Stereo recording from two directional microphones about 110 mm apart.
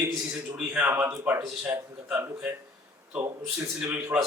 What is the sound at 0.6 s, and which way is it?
Speech, 15° right (ahead or behind).